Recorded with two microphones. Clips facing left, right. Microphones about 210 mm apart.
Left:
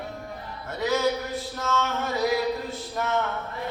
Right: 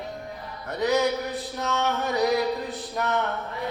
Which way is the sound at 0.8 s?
15° right (ahead or behind).